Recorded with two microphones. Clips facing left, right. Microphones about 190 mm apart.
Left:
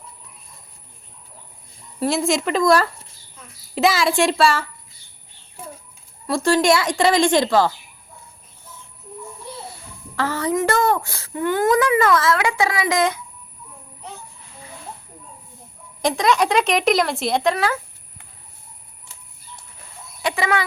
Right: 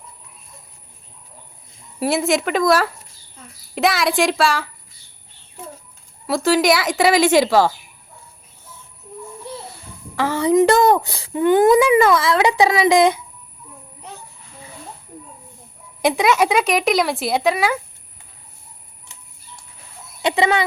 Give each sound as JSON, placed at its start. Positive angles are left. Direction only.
{"t": 2.0, "sound": "speech", "side_deg": -5}
{"t": 6.2, "sound": "speech", "side_deg": -5}
{"t": 10.2, "sound": "speech", "side_deg": -10}
{"t": 16.0, "sound": "speech", "side_deg": -5}
{"t": 20.2, "sound": "speech", "side_deg": -25}